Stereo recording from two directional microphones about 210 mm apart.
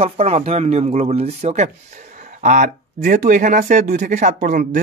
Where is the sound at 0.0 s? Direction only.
30° right (ahead or behind).